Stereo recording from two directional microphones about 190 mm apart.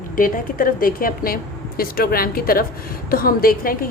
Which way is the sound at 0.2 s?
45° left (ahead or behind).